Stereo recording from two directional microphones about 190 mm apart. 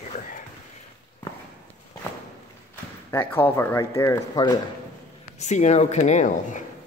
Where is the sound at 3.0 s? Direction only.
10° left (ahead or behind).